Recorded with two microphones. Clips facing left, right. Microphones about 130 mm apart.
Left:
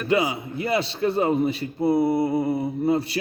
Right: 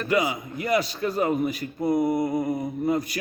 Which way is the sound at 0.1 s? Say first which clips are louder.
Left 2 dB; 30° left (ahead or behind).